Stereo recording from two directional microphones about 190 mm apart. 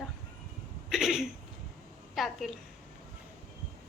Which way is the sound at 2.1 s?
Centre (ahead or behind).